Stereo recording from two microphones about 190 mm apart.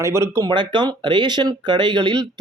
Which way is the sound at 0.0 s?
15° right (ahead or behind).